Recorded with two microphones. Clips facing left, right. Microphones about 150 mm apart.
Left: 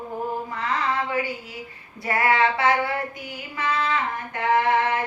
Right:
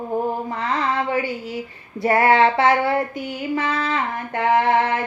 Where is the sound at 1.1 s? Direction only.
30° right (ahead or behind).